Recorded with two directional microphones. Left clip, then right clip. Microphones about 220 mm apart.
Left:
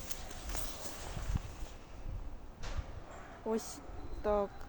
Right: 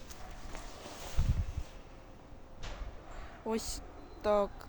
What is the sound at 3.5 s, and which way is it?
Speech, 10° right (ahead or behind).